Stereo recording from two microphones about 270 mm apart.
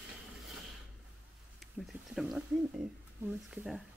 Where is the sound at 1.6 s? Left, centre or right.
Centre.